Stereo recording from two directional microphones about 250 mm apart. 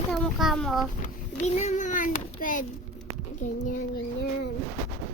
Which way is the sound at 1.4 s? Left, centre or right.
Left.